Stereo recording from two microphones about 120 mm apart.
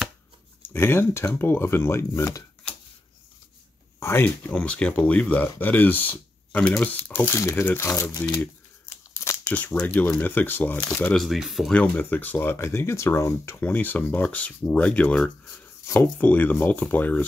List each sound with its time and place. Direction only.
0.7 s speech: 20° left (ahead or behind)
4.0 s speech: 20° left (ahead or behind)
4.5 s speech: 10° left (ahead or behind)
9.2 s crumpling: 25° left (ahead or behind)
9.5 s speech: 15° left (ahead or behind)
11.2 s speech: centre (ahead or behind)
11.7 s speech: 10° left (ahead or behind)